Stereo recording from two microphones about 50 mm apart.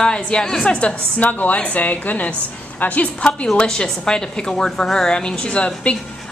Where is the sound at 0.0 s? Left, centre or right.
Centre.